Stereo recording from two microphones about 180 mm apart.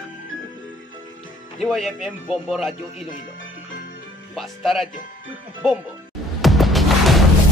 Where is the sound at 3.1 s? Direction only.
45° left (ahead or behind).